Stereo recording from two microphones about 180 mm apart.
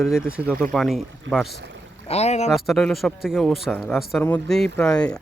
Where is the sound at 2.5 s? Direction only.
Centre (ahead or behind).